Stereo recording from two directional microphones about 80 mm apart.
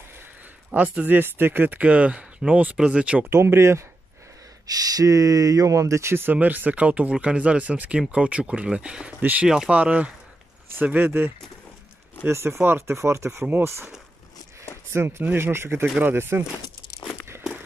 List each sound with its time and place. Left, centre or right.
0.7 s speech: centre
3.3 s speech: right
4.6 s speech: right
6.3 s speech: right
9.5 s speech: centre; by 13.8 s right
14.9 s speech: right